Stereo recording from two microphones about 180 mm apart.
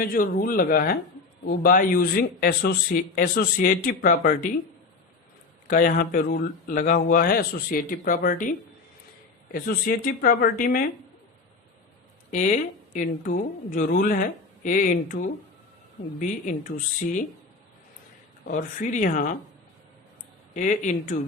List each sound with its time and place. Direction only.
0.0 s speech: 55° left (ahead or behind)
5.6 s speech: 50° left (ahead or behind)
12.3 s speech: 45° left (ahead or behind)
18.4 s speech: 50° left (ahead or behind)
20.6 s speech: 45° left (ahead or behind)